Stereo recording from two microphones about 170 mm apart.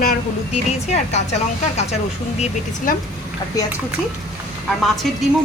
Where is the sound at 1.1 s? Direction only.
40° left (ahead or behind).